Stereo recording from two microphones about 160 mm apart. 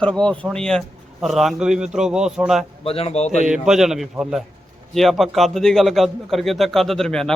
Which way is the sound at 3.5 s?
5° right (ahead or behind).